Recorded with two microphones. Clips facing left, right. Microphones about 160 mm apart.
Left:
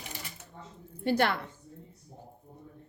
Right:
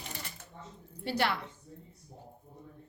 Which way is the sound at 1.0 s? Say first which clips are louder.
Left 4 dB; 50° left (ahead or behind).